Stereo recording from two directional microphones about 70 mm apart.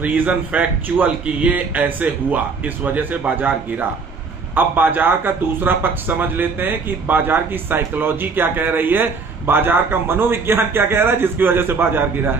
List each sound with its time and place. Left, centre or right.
0.0 s speech: right